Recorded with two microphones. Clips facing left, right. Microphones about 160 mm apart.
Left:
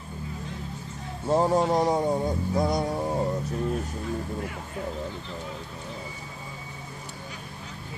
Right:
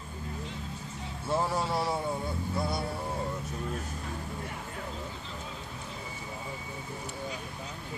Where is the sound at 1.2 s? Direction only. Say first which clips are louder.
Left 8 dB; 40° left (ahead or behind).